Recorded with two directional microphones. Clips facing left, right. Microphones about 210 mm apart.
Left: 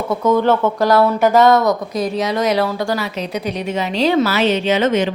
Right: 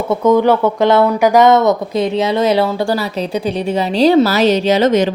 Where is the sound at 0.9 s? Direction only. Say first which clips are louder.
Right 2 dB; 25° right (ahead or behind).